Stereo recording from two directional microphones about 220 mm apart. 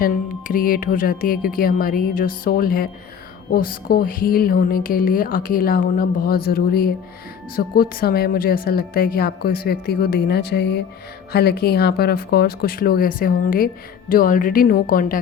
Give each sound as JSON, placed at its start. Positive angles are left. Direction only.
{"t": 0.0, "sound": "a woman's voice", "side_deg": 40}